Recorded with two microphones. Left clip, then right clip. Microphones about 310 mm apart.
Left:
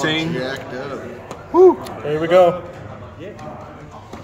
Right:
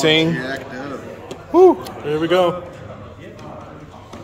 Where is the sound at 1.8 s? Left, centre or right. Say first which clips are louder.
Even; centre.